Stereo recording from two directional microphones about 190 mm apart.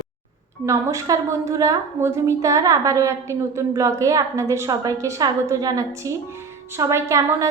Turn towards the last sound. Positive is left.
turn(degrees=-15)  # may be behind; listen again after turning